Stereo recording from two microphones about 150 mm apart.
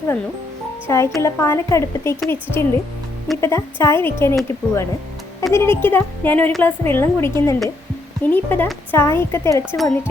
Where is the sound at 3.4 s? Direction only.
15° left (ahead or behind).